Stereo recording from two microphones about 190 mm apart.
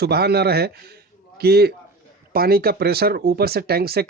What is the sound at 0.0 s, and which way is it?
A man's voice, 55° right (ahead or behind).